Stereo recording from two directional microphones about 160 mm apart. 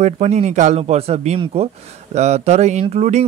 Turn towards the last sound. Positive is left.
turn(degrees=-45)  # may be behind; listen again after turning